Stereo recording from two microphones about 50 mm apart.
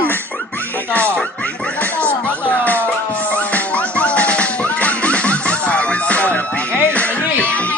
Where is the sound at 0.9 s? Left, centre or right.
Left.